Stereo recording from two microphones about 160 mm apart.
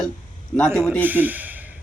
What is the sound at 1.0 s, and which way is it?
Speech, 10° right (ahead or behind).